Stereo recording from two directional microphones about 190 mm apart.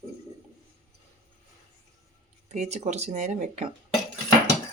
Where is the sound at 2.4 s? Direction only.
35° right (ahead or behind).